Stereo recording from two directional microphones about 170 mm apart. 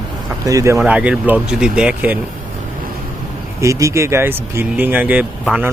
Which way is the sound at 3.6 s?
20° right (ahead or behind).